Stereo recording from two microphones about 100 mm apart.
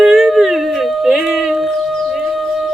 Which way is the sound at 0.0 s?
Centre (ahead or behind).